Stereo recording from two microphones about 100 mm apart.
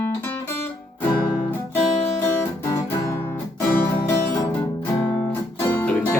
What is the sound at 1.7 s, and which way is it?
Guitar, 25° left (ahead or behind).